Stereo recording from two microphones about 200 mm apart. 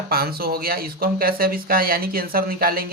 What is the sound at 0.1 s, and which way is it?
Speech, 50° right (ahead or behind).